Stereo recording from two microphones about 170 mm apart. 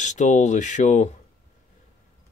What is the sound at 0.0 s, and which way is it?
Speech, 45° left (ahead or behind).